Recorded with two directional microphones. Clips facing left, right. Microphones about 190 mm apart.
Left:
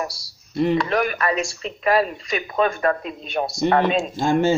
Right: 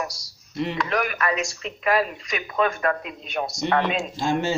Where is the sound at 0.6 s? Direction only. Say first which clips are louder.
Left 7 dB; 45° left (ahead or behind).